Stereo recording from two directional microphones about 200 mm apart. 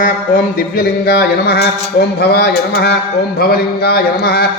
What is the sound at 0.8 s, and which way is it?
A man's voice, 50° left (ahead or behind).